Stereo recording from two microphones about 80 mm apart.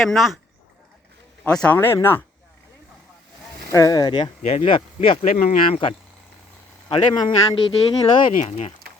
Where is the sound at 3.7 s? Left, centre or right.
Left.